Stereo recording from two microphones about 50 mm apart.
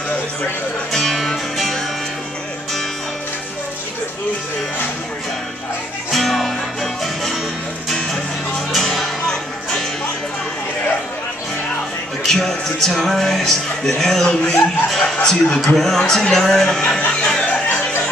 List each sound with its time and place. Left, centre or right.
0.9 s music: centre
6.1 s music: centre
8.5 s music: centre
12.3 s speech: centre
17.5 s a sound: left